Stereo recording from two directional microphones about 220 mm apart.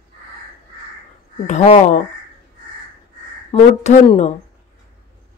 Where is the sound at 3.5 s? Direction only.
25° left (ahead or behind).